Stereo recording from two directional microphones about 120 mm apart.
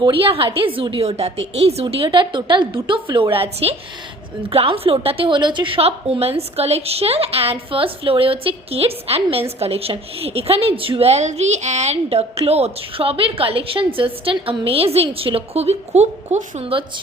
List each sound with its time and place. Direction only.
0.0 s a woman's voice: 45° right (ahead or behind)
2.0 s a woman's voice: 40° right (ahead or behind); by 16.7 s 70° right (ahead or behind)